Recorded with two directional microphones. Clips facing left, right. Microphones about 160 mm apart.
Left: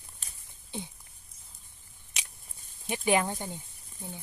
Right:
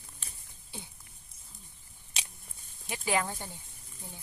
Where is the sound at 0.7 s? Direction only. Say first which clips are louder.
Left 8 dB; 20° left (ahead or behind).